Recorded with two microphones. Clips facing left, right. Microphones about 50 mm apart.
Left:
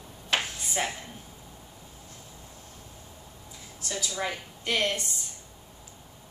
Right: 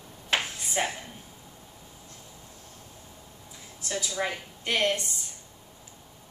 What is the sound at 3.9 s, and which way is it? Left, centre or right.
A woman's voice, centre.